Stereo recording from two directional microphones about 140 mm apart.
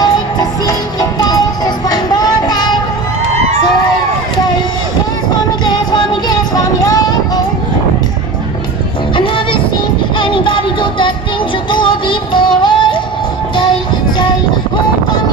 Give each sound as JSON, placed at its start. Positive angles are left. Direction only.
{"t": 0.0, "sound": "music", "side_deg": 25}
{"t": 1.9, "sound": "child singing", "side_deg": 30}
{"t": 5.9, "sound": "music", "side_deg": 30}
{"t": 9.1, "sound": "music", "side_deg": 40}
{"t": 10.1, "sound": "a sound", "side_deg": 35}
{"t": 11.7, "sound": "music", "side_deg": 35}